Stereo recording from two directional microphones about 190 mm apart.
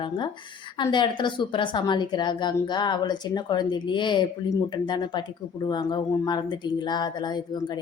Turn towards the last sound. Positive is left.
turn(degrees=20)  # may be behind; listen again after turning